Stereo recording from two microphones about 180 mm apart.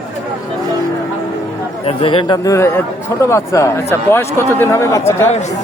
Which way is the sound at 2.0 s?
25° left (ahead or behind).